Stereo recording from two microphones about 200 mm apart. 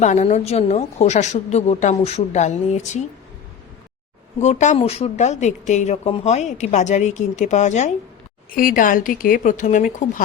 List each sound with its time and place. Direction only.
0.0 s a woman's voice: 35° left (ahead or behind)
4.4 s a woman's voice: 35° left (ahead or behind)